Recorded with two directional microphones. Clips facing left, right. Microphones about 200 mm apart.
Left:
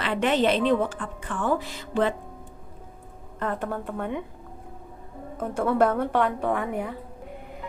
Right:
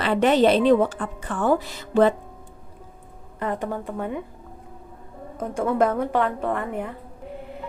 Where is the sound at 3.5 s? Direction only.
10° right (ahead or behind).